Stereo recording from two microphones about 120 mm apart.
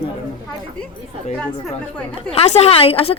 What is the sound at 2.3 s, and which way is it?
Speech, 65° left (ahead or behind).